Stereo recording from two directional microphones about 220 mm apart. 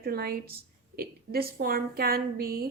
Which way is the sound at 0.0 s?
45° right (ahead or behind).